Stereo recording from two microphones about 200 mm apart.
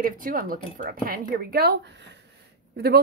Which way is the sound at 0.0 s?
45° right (ahead or behind).